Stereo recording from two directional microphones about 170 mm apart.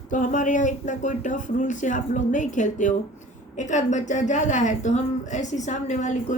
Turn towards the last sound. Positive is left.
turn(degrees=45)  # may be behind; listen again after turning